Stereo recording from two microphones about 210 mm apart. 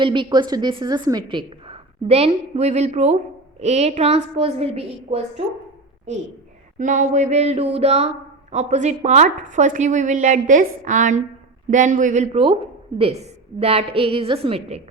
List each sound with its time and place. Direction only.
0.0 s a woman's voice: 25° right (ahead or behind)
6.7 s a woman's voice: 35° right (ahead or behind)